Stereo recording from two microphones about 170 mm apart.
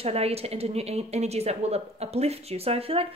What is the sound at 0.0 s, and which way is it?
A woman's voice, 35° right (ahead or behind).